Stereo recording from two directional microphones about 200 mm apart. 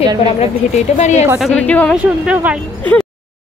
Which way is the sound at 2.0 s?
5° right (ahead or behind).